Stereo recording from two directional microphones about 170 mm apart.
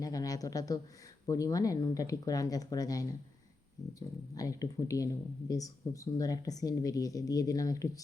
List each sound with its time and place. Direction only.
0.0 s speech: 20° left (ahead or behind)
4.4 s speech: 20° left (ahead or behind)